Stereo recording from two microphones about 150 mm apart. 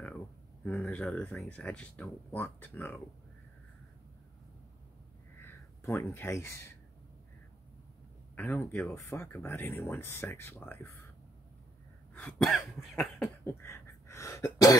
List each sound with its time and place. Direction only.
0.7 s speech: 5° left (ahead or behind)
5.4 s speech: 15° left (ahead or behind)
8.4 s speech: 15° left (ahead or behind)
12.1 s cough: 5° left (ahead or behind)
13.4 s cough: 15° left (ahead or behind)